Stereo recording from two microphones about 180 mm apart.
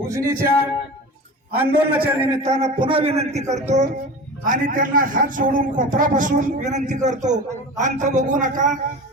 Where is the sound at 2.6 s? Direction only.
30° right (ahead or behind).